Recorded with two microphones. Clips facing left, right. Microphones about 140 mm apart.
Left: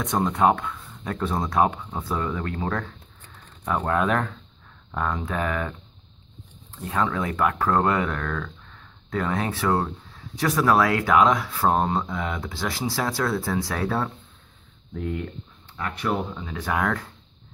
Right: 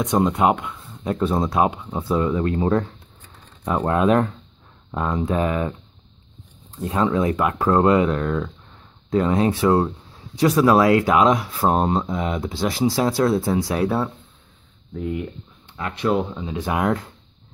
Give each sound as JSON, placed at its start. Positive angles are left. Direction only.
{"t": 0.0, "sound": "speech", "side_deg": -15}
{"t": 6.8, "sound": "speech", "side_deg": -20}
{"t": 15.8, "sound": "speech", "side_deg": -20}